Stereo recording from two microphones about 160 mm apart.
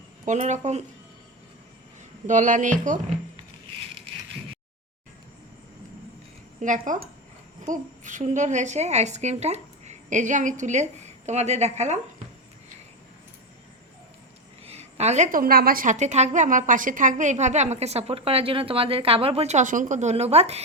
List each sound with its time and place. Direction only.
0.3 s a woman's voice: 45° right (ahead or behind)
2.2 s a woman's voice: 50° right (ahead or behind)
6.6 s a woman's voice: 50° right (ahead or behind)
14.6 s a woman's voice: 40° right (ahead or behind)